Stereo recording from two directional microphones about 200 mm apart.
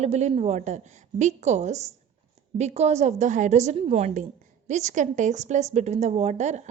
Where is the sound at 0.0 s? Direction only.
35° right (ahead or behind).